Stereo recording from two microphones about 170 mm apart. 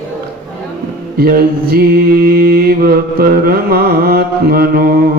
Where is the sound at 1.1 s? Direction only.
60° right (ahead or behind).